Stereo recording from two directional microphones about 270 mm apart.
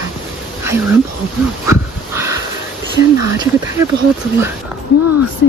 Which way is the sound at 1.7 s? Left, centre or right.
Centre.